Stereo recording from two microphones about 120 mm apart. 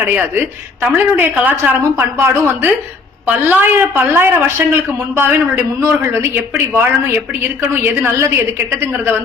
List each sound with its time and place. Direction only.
0.0 s a woman's voice: 15° right (ahead or behind)
8.0 s speech: 20° right (ahead or behind)